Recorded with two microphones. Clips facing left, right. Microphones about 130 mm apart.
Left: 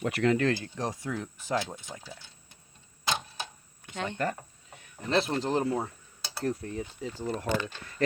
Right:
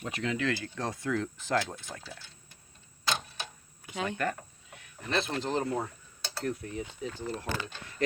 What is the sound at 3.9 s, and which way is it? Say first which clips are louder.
Speech: right 1 dB; 5° right (ahead or behind).